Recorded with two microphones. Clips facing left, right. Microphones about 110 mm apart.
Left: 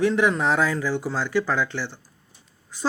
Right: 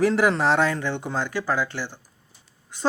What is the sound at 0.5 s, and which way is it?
Speech, 65° right (ahead or behind).